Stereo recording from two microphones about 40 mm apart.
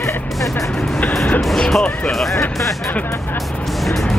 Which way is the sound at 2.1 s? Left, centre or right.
Centre.